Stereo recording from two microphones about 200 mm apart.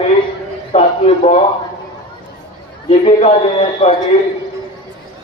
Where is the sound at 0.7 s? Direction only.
30° left (ahead or behind).